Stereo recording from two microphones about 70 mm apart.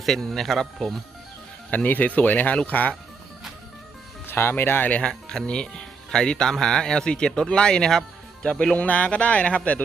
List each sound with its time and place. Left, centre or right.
0.0 s speech: centre
1.7 s speech: left
4.3 s speech: left
4.9 s speech: centre